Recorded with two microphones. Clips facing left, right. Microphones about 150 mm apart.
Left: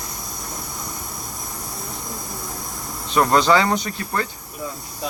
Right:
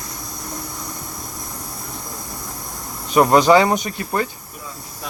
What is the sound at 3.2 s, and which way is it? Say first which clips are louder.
Speech: right 4 dB; 20° right (ahead or behind).